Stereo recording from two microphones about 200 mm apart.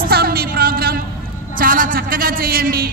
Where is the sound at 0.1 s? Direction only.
50° right (ahead or behind).